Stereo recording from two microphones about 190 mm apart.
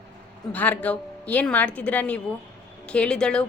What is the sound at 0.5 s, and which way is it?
A woman's voice, 10° left (ahead or behind).